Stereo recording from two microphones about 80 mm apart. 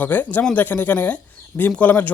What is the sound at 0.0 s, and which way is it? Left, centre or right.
Speech, left.